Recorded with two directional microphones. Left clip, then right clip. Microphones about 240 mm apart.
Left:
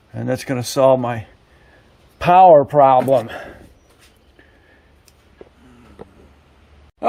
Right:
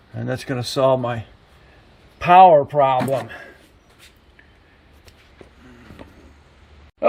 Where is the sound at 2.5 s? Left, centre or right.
Left.